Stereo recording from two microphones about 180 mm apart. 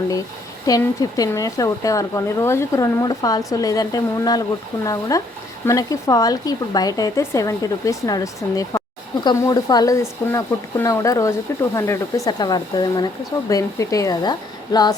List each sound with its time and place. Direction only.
0.6 s speech: 20° left (ahead or behind)